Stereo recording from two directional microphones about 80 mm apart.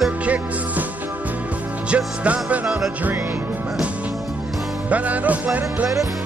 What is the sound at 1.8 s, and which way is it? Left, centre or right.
Music, centre.